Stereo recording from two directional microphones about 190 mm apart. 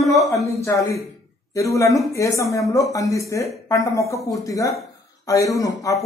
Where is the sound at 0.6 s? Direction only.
15° left (ahead or behind).